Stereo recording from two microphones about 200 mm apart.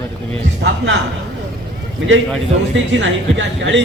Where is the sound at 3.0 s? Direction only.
65° right (ahead or behind).